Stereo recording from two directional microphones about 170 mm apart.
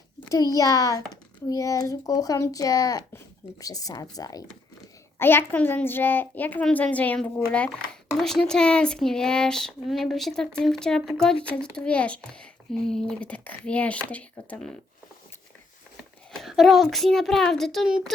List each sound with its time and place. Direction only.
0.3 s a child's voice: 20° left (ahead or behind)
16.3 s speech: centre (ahead or behind)